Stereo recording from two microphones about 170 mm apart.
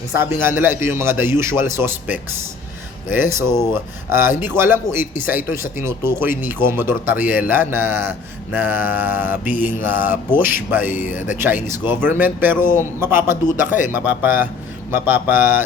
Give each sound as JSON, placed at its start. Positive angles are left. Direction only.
{"t": 0.2, "sound": "a man's voice", "side_deg": -15}
{"t": 10.9, "sound": "speech", "side_deg": 50}
{"t": 11.2, "sound": "a man's voice", "side_deg": -10}